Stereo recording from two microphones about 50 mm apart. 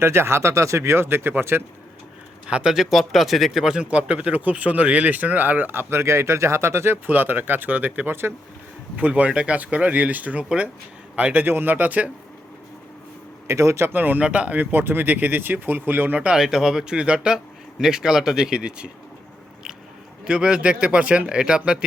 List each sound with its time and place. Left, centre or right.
0.0 s speech: right
2.6 s speech: centre
3.8 s speech: right
5.9 s speech: right
6.9 s speech: right
11.4 s speech: right
13.5 s a man's voice: right
13.9 s speech: right
14.3 s speech: right
14.6 s speech: right
16.3 s a man's voice: centre
20.2 s speech: centre
21.2 s a man's voice: centre